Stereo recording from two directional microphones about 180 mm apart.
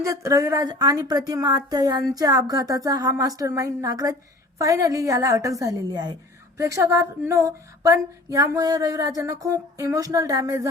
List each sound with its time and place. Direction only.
0.0 s a woman's voice: 20° right (ahead or behind)